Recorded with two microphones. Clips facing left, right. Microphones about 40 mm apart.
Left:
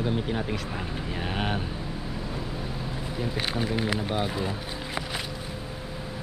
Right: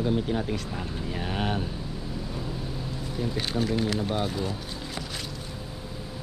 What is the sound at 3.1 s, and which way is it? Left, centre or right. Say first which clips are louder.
Speech: right 1 dB; centre.